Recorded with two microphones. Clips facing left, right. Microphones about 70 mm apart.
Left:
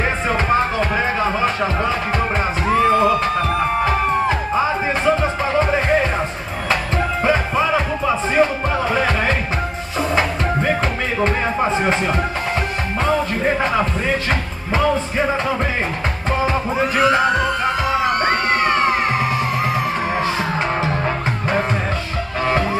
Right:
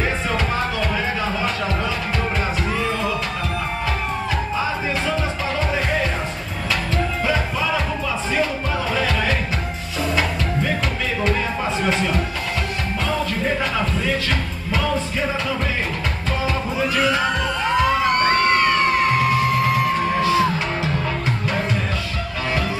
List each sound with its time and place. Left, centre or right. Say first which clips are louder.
0.3 s music: left 5 dB; left
2.7 s music: left 13 dB; left
4.6 s music: left 5 dB; left
7.2 s music: left 6 dB; left
13.6 s music: left 4 dB; left
16.4 s music: left 2 dB; left
20.2 s music: right 2 dB; left